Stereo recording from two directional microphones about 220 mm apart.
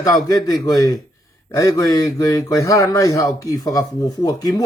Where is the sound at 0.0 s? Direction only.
15° left (ahead or behind).